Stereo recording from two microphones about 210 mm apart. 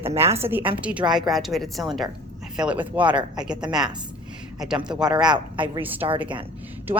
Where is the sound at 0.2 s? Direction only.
30° right (ahead or behind).